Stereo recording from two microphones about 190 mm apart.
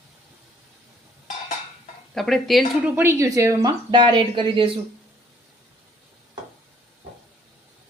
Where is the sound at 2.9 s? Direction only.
10° right (ahead or behind).